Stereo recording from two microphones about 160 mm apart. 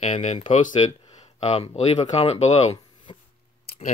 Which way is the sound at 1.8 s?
45° left (ahead or behind).